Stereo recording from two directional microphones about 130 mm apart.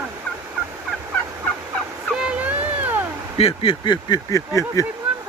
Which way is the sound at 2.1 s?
5° right (ahead or behind).